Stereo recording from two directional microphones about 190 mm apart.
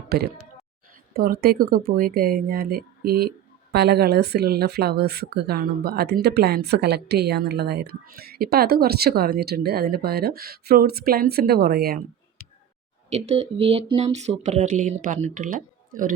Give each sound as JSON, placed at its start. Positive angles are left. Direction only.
{"t": 0.1, "sound": "speech", "side_deg": -55}
{"t": 13.1, "sound": "speech", "side_deg": -35}